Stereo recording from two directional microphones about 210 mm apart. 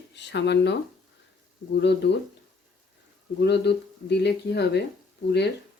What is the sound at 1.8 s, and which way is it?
Speech, 55° left (ahead or behind).